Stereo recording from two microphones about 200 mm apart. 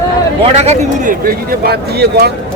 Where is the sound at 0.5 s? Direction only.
35° right (ahead or behind); by 2.3 s 50° right (ahead or behind).